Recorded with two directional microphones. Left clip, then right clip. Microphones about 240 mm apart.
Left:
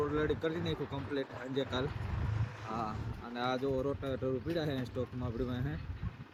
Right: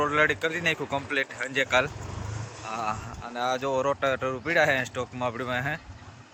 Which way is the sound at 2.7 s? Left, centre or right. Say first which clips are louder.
Right 9 dB; right.